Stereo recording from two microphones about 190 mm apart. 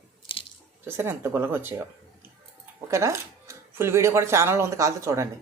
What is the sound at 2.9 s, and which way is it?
A woman's voice, 15° right (ahead or behind).